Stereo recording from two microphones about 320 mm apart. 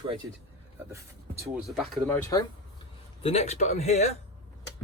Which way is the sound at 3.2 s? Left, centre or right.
Centre.